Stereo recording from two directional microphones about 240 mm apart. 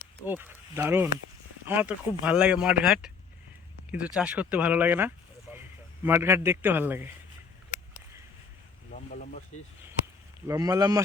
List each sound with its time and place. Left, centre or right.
0.3 s a man's voice: centre
10.4 s a man's voice: centre